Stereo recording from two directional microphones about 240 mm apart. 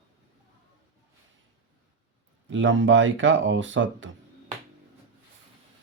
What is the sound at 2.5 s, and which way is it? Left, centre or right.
Speech, right.